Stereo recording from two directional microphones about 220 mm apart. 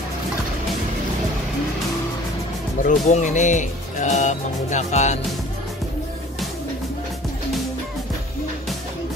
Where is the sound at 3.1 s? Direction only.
35° left (ahead or behind).